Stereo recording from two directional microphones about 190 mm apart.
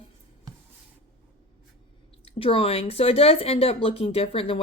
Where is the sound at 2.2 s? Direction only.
30° left (ahead or behind).